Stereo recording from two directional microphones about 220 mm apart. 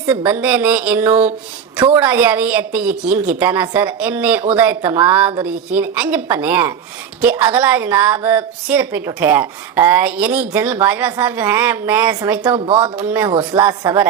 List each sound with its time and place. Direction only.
0.1 s a woman's voice: 10° right (ahead or behind)
12.5 s a woman's voice: 25° right (ahead or behind)